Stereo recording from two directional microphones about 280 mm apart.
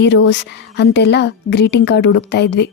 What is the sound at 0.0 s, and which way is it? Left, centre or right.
A woman's voice, left.